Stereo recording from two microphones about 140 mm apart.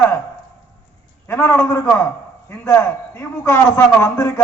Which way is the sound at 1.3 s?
15° left (ahead or behind).